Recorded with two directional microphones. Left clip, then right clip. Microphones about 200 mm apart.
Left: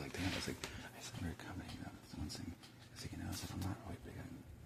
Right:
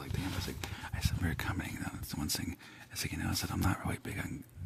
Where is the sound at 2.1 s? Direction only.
60° right (ahead or behind).